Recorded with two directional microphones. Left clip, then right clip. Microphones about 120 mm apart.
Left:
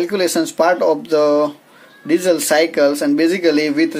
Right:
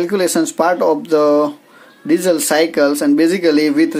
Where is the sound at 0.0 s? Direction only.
40° right (ahead or behind).